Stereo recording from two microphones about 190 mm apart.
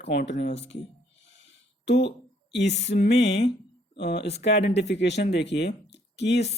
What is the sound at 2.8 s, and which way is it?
Speech, 65° left (ahead or behind).